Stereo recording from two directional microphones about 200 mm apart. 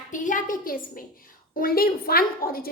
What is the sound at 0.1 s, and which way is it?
A woman's voice, 40° left (ahead or behind).